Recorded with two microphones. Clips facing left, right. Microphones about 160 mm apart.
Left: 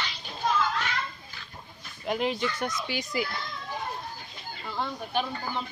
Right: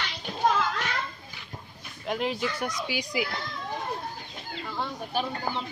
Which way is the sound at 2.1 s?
Centre (ahead or behind).